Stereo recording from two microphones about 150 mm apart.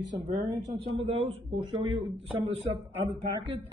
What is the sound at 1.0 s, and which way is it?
Speech, 40° right (ahead or behind).